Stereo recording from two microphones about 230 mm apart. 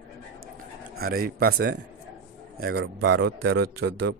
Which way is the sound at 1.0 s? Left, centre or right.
Right.